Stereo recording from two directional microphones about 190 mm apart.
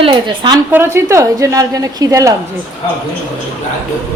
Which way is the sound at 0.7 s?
15° right (ahead or behind).